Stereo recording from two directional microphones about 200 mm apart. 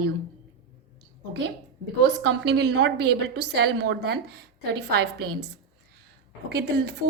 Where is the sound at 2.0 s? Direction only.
60° right (ahead or behind).